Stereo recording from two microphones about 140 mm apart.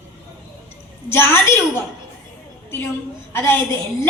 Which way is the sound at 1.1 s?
15° left (ahead or behind).